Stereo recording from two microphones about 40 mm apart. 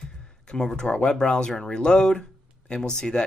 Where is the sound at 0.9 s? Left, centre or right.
Left.